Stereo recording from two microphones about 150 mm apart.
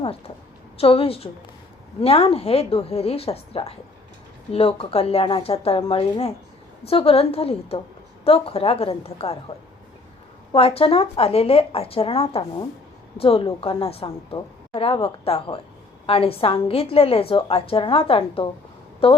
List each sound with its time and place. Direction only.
0.8 s a woman's voice: 40° left (ahead or behind)
10.5 s a woman's voice: 40° left (ahead or behind)